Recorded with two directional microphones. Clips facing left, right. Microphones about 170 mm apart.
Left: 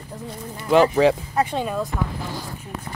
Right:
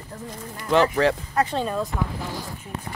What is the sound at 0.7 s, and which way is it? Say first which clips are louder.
Speech: left 4 dB; 15° left (ahead or behind).